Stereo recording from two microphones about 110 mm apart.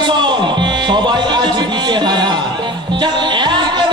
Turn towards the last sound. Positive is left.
turn(degrees=-45)  # may be behind; listen again after turning